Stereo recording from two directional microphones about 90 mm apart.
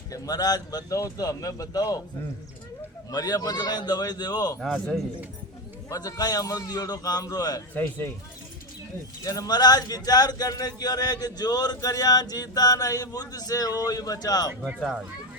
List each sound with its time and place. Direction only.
0.1 s speech: 45° left (ahead or behind)
3.1 s speech: 45° left (ahead or behind)
5.9 s speech: 45° left (ahead or behind)
7.7 s speech: 20° left (ahead or behind)
9.2 s speech: 40° left (ahead or behind)